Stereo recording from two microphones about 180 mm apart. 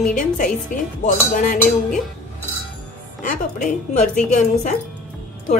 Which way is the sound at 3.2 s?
45° left (ahead or behind).